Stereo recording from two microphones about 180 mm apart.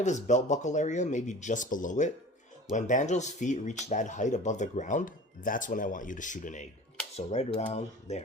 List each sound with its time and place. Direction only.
0.0 s speech: 40° left (ahead or behind)